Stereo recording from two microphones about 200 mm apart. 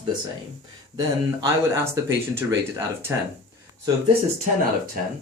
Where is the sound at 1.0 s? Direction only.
15° right (ahead or behind).